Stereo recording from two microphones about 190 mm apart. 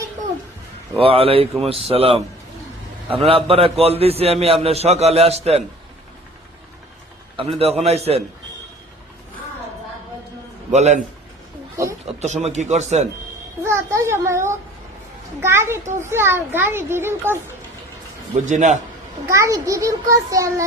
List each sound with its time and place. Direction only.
0.9 s a man's voice: 30° right (ahead or behind)
7.3 s a man's voice: 30° right (ahead or behind)
10.7 s a man's voice: 35° right (ahead or behind)
11.8 s a child's voice: 15° right (ahead or behind)
12.2 s a man's voice: 35° right (ahead or behind)
13.7 s a child's voice: 15° right (ahead or behind)
18.3 s a man's voice: 40° right (ahead or behind)
19.2 s a child's voice: 15° right (ahead or behind)